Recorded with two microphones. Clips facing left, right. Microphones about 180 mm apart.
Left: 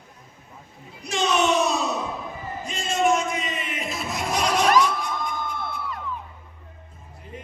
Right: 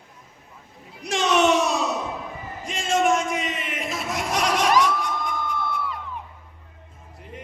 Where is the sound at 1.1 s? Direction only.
90° right.